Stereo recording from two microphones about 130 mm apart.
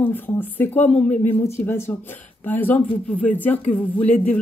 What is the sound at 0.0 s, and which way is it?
Speech, 15° left (ahead or behind).